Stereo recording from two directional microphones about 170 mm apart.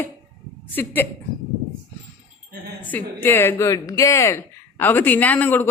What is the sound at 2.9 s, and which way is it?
Speech, 10° left (ahead or behind).